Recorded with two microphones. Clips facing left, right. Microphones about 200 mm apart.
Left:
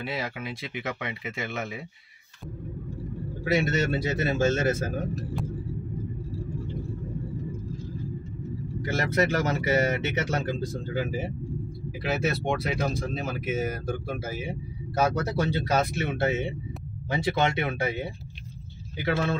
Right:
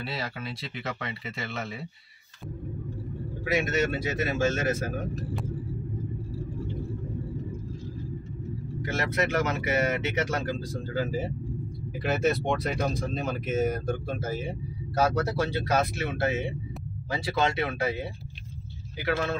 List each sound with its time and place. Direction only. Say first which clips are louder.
0.0 s speech: left 2 dB; 15° left (ahead or behind)
3.4 s a man's voice: left 1 dB; 30° left (ahead or behind)
8.9 s speech: left 2 dB; 35° left (ahead or behind); by 11.3 s 15° left (ahead or behind)
12.0 s speech: right 2 dB; 5° left (ahead or behind); by 18.0 s 25° left (ahead or behind)
19.0 s speech: left 1 dB; 25° left (ahead or behind)